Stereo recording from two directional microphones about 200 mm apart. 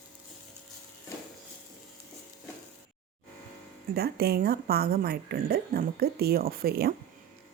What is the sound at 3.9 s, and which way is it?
A woman's voice, 50° right (ahead or behind).